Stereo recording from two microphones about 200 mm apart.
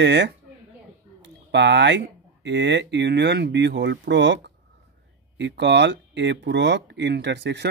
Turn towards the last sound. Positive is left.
turn(degrees=-60)  # may be behind; listen again after turning